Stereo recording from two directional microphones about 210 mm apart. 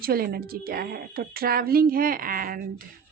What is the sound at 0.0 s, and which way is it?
A woman's voice, 45° right (ahead or behind).